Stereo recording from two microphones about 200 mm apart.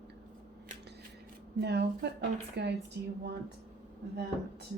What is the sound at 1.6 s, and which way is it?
A woman's voice, 55° right (ahead or behind).